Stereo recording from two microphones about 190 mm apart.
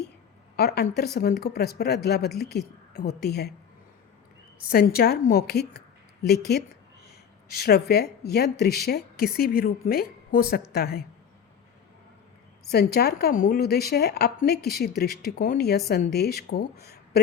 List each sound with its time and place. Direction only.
0.5 s speech: 55° left (ahead or behind)
4.7 s speech: 50° left (ahead or behind)
12.7 s speech: 55° left (ahead or behind)